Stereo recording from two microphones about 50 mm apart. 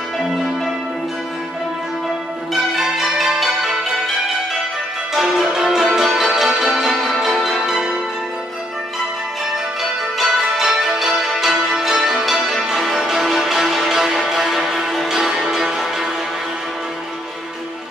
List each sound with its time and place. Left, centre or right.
2.5 s change ringing: centre
5.1 s music: centre
6.2 s change ringing: centre
10.1 s music: centre